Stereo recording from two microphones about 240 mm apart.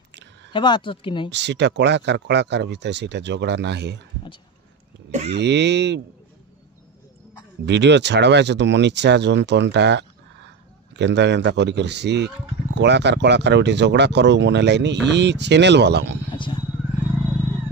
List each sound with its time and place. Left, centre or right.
0.5 s speech: centre
1.3 s speech: right
5.3 s speech: right
7.6 s speech: right